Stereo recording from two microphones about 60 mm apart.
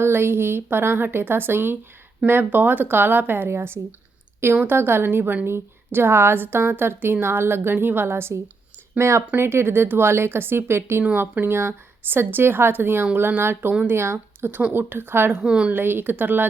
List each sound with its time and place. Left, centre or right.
0.0 s a woman's voice: right
15.4 s a woman's voice: centre
15.7 s a woman's voice: right